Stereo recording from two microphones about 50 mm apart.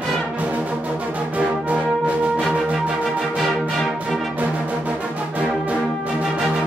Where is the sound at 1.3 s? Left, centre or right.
Right.